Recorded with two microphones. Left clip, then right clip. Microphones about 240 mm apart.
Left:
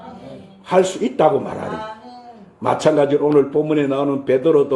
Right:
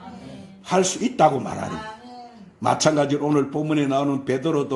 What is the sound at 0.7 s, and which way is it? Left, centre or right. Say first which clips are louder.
Speech: left 5 dB; right.